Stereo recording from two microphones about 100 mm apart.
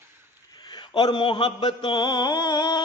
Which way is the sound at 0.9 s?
50° left (ahead or behind).